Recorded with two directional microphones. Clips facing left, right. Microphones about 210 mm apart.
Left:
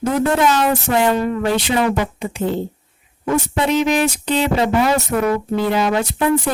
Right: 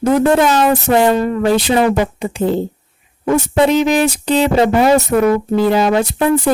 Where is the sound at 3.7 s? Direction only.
35° right (ahead or behind).